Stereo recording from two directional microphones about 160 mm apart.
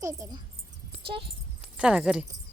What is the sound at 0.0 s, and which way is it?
Speech, 20° right (ahead or behind).